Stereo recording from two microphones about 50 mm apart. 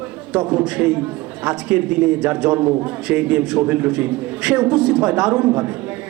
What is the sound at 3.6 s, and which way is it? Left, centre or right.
A man's voice, right.